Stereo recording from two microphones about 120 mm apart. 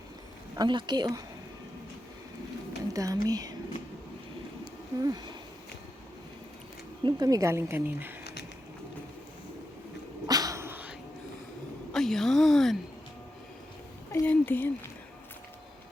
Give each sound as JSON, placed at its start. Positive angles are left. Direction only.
{"t": 0.5, "sound": "speech", "side_deg": -40}
{"t": 2.9, "sound": "speech", "side_deg": -30}
{"t": 4.9, "sound": "speech", "side_deg": -30}
{"t": 7.0, "sound": "speech", "side_deg": -30}
{"t": 10.2, "sound": "dog", "side_deg": -30}
{"t": 11.9, "sound": "a woman's voice", "side_deg": 5}
{"t": 14.1, "sound": "a woman's voice", "side_deg": 15}